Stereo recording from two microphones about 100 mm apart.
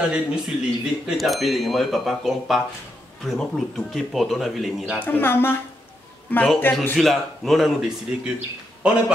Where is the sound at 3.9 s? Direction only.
Centre (ahead or behind).